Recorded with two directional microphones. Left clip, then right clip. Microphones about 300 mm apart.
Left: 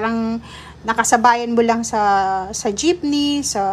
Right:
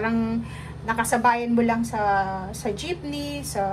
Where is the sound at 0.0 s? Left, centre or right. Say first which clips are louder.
Left 4 dB; centre.